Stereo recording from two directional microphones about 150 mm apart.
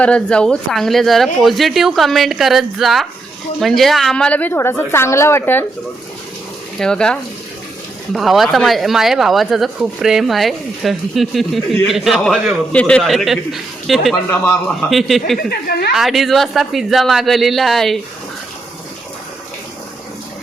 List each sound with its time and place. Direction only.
0.0 s a woman's voice: 5° left (ahead or behind)
6.7 s speech: 5° left (ahead or behind)
14.3 s a woman's voice: 15° left (ahead or behind)
14.8 s speech: centre (ahead or behind)
15.4 s a woman's voice: 90° left
16.0 s speech: centre (ahead or behind)